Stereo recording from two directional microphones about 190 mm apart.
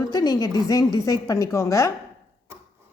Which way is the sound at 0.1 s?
20° left (ahead or behind).